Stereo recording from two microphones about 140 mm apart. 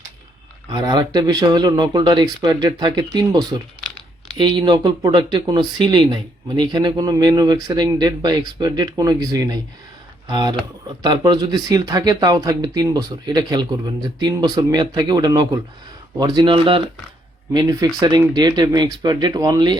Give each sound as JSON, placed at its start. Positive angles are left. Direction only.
{"t": 0.7, "sound": "speech", "side_deg": -25}
{"t": 17.5, "sound": "speech", "side_deg": -25}